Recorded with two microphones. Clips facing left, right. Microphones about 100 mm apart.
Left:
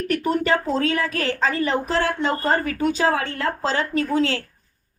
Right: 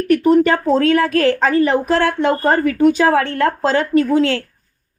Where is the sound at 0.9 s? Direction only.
60° right (ahead or behind).